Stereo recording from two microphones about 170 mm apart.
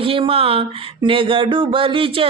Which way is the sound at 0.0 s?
30° right (ahead or behind).